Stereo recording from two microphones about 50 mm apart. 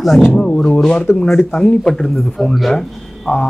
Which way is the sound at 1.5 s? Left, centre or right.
Centre.